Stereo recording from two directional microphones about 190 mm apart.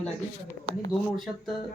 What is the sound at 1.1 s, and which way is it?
Speech, centre (ahead or behind).